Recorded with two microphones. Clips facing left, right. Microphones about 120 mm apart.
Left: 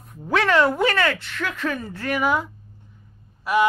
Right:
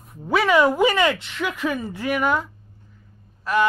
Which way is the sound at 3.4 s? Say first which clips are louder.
Left 1 dB; 10° left (ahead or behind).